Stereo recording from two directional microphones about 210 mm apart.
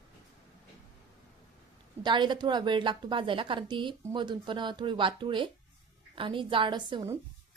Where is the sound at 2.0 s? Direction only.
20° right (ahead or behind).